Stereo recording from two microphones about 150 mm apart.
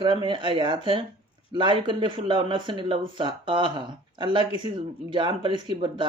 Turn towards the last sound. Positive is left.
turn(degrees=-35)  # may be behind; listen again after turning